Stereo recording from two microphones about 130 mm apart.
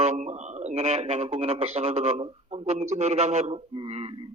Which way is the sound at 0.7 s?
55° right (ahead or behind).